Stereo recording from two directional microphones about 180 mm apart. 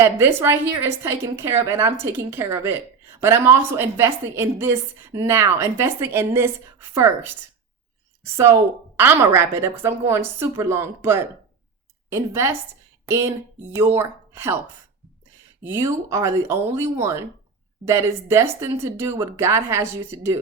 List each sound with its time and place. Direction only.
0.0 s a woman's voice: 15° right (ahead or behind)
8.2 s a woman's voice: 15° right (ahead or behind)
15.6 s a woman's voice: 15° right (ahead or behind)